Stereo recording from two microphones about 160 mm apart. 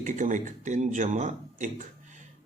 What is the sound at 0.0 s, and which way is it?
Speech, 50° right (ahead or behind).